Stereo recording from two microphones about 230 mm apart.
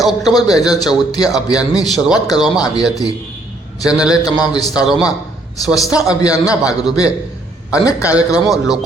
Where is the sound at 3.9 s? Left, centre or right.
Centre.